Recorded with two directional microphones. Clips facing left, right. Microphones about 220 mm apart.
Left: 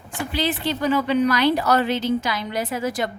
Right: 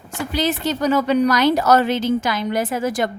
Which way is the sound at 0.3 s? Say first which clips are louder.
Right 3 dB; 45° right (ahead or behind).